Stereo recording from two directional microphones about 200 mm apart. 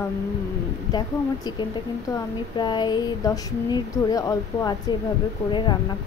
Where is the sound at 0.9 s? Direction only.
20° left (ahead or behind).